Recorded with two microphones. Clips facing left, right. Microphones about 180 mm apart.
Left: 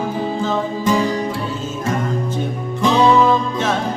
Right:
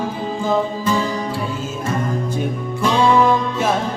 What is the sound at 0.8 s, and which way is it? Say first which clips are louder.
Music: left 3 dB; 15° left (ahead or behind).